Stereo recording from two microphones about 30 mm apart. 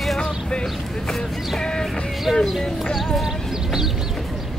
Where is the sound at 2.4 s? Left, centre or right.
Centre.